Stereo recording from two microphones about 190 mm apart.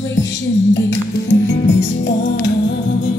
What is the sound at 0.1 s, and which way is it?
Music, 75° left (ahead or behind).